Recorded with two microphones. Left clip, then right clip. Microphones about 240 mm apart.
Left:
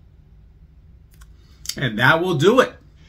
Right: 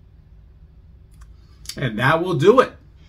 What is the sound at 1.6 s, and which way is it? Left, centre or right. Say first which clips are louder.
Speech: left 3 dB; centre.